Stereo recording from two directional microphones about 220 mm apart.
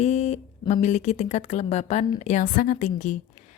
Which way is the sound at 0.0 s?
30° left (ahead or behind).